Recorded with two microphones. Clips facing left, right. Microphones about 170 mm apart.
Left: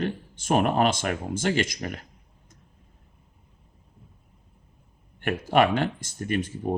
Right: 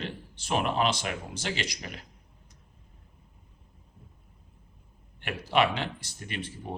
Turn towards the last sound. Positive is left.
turn(degrees=45)  # may be behind; listen again after turning